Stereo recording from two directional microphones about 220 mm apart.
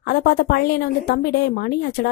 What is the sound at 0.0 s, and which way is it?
A woman's voice, 45° left (ahead or behind).